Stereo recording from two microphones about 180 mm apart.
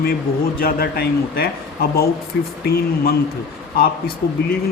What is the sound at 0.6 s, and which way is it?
Speech, 60° left (ahead or behind).